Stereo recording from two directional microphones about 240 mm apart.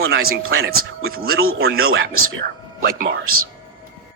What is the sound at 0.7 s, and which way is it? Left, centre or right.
Speech, right.